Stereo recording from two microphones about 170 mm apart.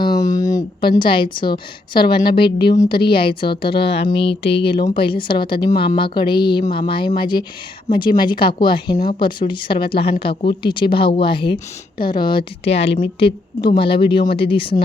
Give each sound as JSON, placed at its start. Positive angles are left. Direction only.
{"t": 0.3, "sound": "a woman's voice", "side_deg": 20}
{"t": 3.8, "sound": "speech", "side_deg": 75}
{"t": 4.1, "sound": "a woman's voice", "side_deg": 30}